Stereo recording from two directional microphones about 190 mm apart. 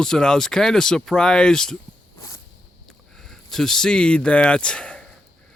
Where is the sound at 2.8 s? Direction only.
5° left (ahead or behind).